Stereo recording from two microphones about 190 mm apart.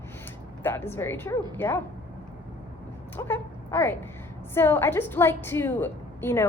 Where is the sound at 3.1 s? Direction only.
10° left (ahead or behind).